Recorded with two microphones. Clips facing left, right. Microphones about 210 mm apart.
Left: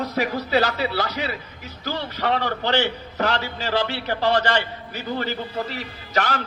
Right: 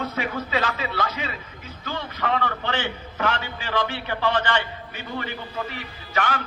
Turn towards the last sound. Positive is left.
turn(degrees=40)  # may be behind; listen again after turning